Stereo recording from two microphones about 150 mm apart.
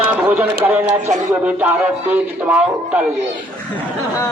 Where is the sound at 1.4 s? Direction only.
10° right (ahead or behind).